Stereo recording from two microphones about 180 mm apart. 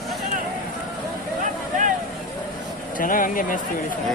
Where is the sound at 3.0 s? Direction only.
50° left (ahead or behind).